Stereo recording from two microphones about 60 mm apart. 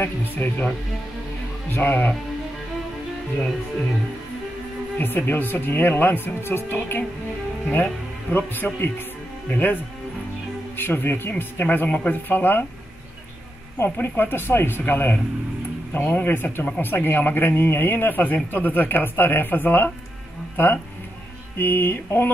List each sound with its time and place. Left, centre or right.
0.0 s speech: left
1.7 s speech: left
4.9 s speech: left
10.8 s speech: left
14.0 s speech: left